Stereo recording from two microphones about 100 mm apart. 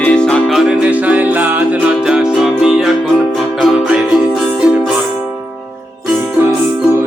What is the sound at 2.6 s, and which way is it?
Music, 5° right (ahead or behind).